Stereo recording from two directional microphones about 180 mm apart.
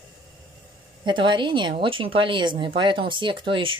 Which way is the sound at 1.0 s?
25° right (ahead or behind).